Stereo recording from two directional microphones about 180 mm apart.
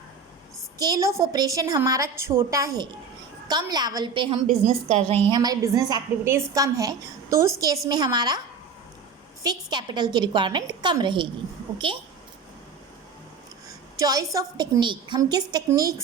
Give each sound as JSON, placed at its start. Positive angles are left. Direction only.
{"t": 0.8, "sound": "a woman's voice", "side_deg": -20}
{"t": 4.6, "sound": "a woman's voice", "side_deg": -40}
{"t": 5.3, "sound": "a woman's voice", "side_deg": -20}
{"t": 9.4, "sound": "a woman's voice", "side_deg": -20}
{"t": 13.9, "sound": "a woman's voice", "side_deg": -20}